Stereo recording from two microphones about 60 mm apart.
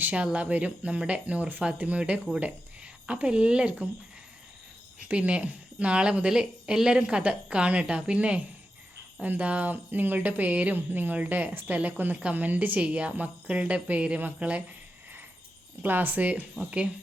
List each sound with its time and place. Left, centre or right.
0.0 s speech: right
5.0 s a woman's voice: right
15.8 s speech: right